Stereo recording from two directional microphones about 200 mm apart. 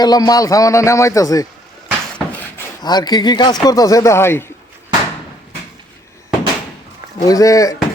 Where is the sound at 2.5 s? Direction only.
15° left (ahead or behind).